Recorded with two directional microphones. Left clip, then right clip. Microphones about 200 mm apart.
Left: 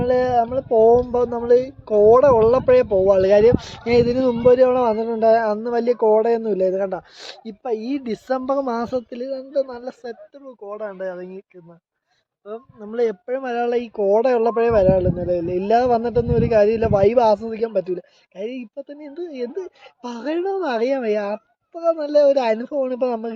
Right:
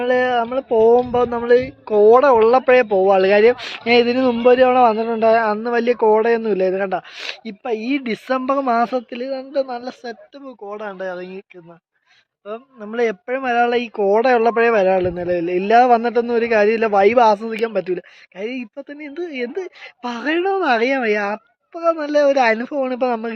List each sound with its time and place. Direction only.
0.0 s speech: 10° right (ahead or behind)
9.8 s speech: 30° right (ahead or behind)
12.9 s speech: 10° right (ahead or behind)